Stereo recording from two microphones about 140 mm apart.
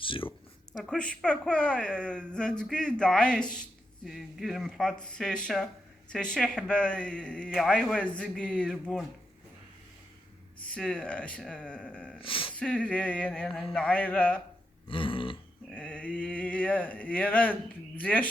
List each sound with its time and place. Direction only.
0.0 s speech: 40° left (ahead or behind)
0.7 s a man's voice: centre (ahead or behind)
10.6 s a man's voice: 5° left (ahead or behind)
12.2 s speech: 40° left (ahead or behind)
12.5 s a man's voice: 10° left (ahead or behind)
14.8 s burping: 40° left (ahead or behind)
15.7 s a sound: 10° left (ahead or behind)